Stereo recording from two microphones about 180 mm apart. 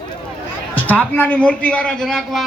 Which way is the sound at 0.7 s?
10° left (ahead or behind).